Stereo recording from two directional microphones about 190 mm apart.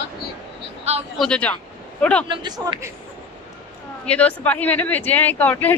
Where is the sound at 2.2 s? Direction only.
25° right (ahead or behind).